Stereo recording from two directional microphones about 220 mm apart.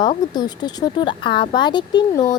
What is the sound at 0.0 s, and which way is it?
Speech, 20° left (ahead or behind).